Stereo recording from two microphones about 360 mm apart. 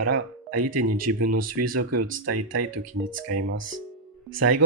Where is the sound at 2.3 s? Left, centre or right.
Right.